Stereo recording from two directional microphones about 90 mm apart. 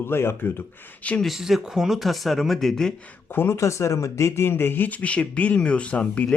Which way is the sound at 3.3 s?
25° left (ahead or behind).